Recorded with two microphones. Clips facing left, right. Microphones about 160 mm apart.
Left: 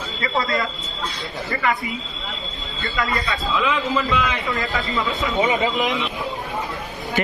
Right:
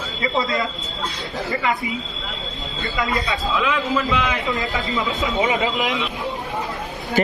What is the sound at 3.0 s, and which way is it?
Speech, 20° right (ahead or behind).